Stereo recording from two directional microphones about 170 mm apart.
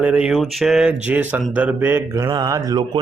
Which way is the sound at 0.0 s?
5° right (ahead or behind).